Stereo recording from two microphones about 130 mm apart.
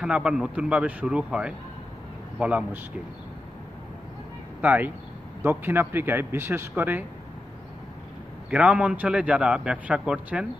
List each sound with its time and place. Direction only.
0.0 s a man's voice: 5° right (ahead or behind)
4.6 s a man's voice: 10° right (ahead or behind)
8.5 s a man's voice: 10° right (ahead or behind)